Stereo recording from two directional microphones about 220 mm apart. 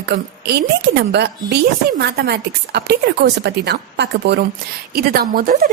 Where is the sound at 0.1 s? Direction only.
50° right (ahead or behind).